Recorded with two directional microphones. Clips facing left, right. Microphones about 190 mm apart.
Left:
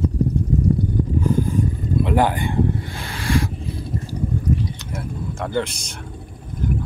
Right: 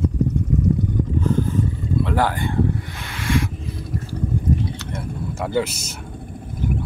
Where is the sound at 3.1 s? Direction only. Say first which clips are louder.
Even; 35° left (ahead or behind).